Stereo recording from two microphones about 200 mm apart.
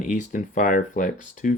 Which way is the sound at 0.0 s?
40° left (ahead or behind).